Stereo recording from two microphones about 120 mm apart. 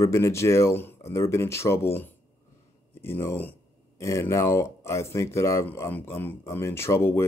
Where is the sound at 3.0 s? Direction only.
20° left (ahead or behind).